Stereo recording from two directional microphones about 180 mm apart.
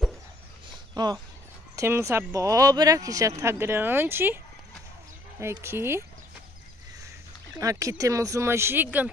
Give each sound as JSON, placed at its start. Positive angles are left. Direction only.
{"t": 0.9, "sound": "speech", "side_deg": -25}
{"t": 5.4, "sound": "speech", "side_deg": -15}
{"t": 7.7, "sound": "speech", "side_deg": -15}